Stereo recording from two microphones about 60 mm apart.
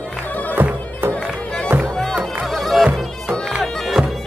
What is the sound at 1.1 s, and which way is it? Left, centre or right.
Music, centre.